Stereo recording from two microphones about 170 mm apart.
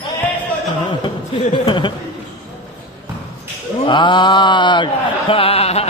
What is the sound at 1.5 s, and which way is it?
Mantra, 25° left (ahead or behind).